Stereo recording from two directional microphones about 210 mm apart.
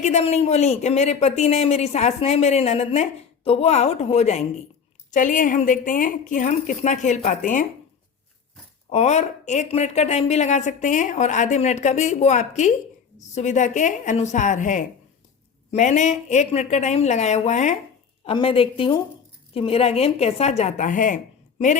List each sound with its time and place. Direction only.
0.0 s speech: 30° left (ahead or behind)
8.9 s a woman's voice: 30° left (ahead or behind)